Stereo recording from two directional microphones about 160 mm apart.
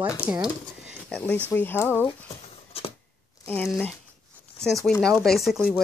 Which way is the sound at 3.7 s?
5° left (ahead or behind).